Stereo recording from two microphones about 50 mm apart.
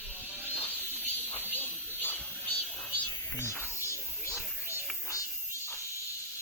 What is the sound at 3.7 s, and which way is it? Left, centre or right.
Music, left.